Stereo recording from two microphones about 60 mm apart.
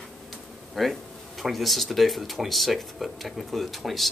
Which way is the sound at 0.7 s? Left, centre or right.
Centre.